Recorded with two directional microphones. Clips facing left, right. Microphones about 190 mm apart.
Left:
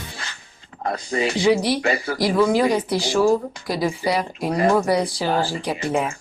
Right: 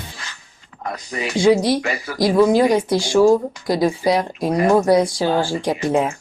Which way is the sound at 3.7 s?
75° right (ahead or behind).